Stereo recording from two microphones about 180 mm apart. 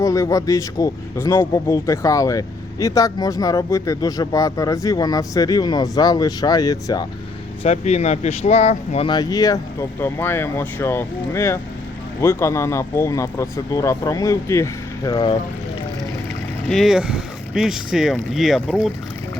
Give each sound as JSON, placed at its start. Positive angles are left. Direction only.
{"t": 0.0, "sound": "a man's voice", "side_deg": 15}
{"t": 7.6, "sound": "speech", "side_deg": 35}
{"t": 9.0, "sound": "speech", "side_deg": 20}
{"t": 16.6, "sound": "speech", "side_deg": 0}